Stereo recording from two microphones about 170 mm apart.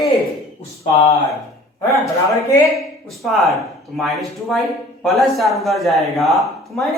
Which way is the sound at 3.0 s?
Centre (ahead or behind).